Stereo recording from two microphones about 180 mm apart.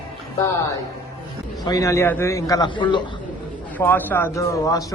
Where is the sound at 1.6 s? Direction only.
20° left (ahead or behind).